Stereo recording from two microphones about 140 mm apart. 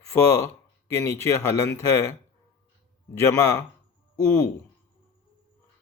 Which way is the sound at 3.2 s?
25° left (ahead or behind).